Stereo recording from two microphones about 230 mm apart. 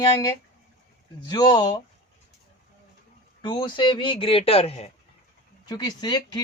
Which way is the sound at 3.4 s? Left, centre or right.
Left.